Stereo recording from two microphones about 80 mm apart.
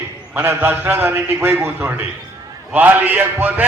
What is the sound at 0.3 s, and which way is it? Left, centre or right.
A man's voice, right.